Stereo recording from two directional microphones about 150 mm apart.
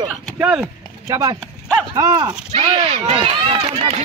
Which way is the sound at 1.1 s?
20° right (ahead or behind).